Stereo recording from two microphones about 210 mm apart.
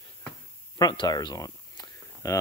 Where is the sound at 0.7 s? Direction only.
20° left (ahead or behind).